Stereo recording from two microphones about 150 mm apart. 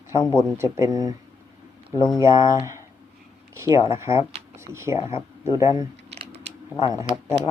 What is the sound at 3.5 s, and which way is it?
Speech, 15° right (ahead or behind).